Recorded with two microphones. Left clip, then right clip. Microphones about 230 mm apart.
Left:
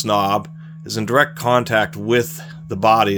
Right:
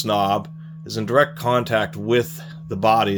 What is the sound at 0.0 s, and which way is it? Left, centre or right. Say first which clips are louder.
Speech: left 2 dB; left.